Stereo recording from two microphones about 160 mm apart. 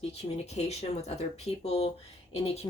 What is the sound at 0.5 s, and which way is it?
Speech, 45° left (ahead or behind).